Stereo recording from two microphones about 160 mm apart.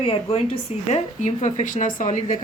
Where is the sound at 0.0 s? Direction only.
35° left (ahead or behind).